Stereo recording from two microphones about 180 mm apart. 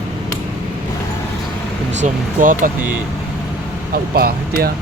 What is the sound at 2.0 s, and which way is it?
Speech, 45° right (ahead or behind).